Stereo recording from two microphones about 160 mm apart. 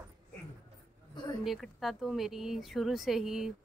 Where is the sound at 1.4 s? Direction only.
Centre (ahead or behind).